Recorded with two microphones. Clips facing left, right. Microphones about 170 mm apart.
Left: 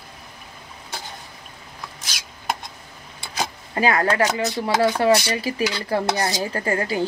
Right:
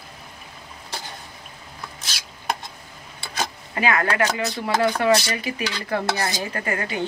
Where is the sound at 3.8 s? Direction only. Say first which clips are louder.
Left 2 dB; 35° left (ahead or behind).